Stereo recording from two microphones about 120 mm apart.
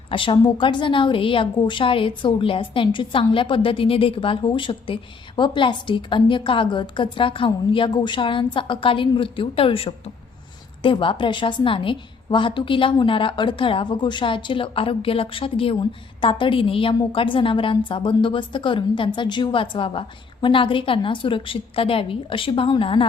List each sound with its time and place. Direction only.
0.1 s a woman's voice: 45° left (ahead or behind)